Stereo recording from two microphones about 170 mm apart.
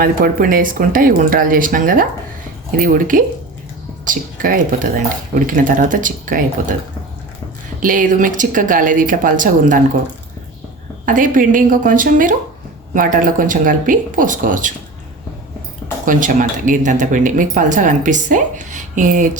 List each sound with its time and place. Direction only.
0.0 s speech: 60° right (ahead or behind)
7.8 s speech: 50° right (ahead or behind)
11.0 s speech: 50° right (ahead or behind)
16.0 s speech: 50° right (ahead or behind)